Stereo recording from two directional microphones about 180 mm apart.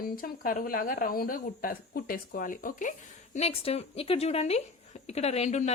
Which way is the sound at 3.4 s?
35° left (ahead or behind).